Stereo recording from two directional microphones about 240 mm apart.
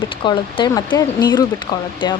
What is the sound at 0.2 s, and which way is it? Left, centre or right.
Speech, centre.